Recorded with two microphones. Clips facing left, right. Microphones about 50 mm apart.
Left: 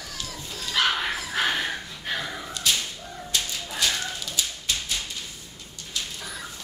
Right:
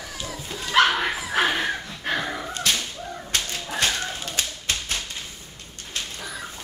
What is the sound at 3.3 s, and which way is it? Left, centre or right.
Dog, right.